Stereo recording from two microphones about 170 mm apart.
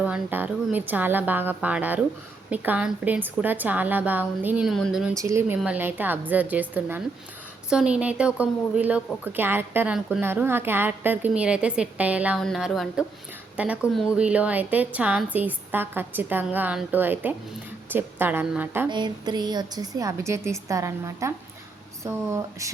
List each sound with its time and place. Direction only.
0.0 s a woman's voice: 10° right (ahead or behind)
5.1 s a woman's voice: 15° right (ahead or behind)
18.9 s a woman's voice: 25° right (ahead or behind)